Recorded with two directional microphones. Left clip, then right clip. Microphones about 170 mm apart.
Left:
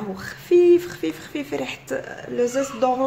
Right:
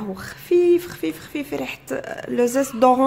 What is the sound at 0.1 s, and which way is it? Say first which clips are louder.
Speech: left 1 dB; 20° right (ahead or behind).